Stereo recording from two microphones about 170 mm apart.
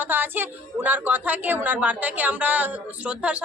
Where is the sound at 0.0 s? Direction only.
10° right (ahead or behind).